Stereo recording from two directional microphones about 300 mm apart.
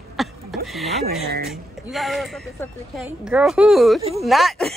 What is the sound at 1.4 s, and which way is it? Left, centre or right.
Speech, centre.